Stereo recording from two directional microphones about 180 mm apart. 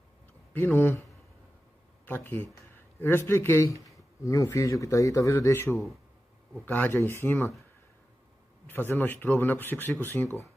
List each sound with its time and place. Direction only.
0.3 s speech: 10° left (ahead or behind)
2.0 s speech: 10° left (ahead or behind)
8.6 s speech: 10° left (ahead or behind)